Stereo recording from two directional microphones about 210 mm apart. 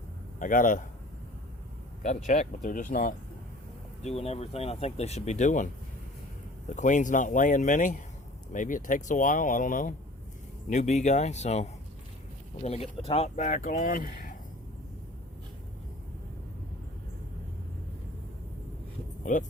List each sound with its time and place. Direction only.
0.3 s speech: 40° left (ahead or behind)
2.0 s speech: 35° left (ahead or behind)
4.0 s speech: 30° left (ahead or behind)
6.7 s speech: 35° left (ahead or behind)
19.2 s speech: 35° left (ahead or behind)